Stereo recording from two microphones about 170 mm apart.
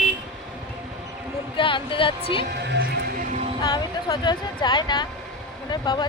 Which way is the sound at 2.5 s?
80° right.